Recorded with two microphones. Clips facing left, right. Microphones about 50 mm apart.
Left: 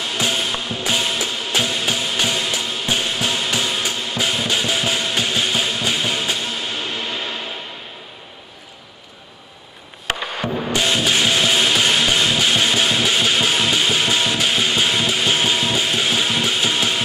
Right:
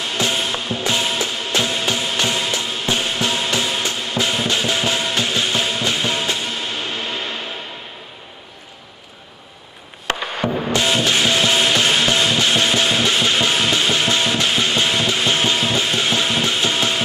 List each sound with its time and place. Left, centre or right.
0.3 s music: centre
10.2 s music: centre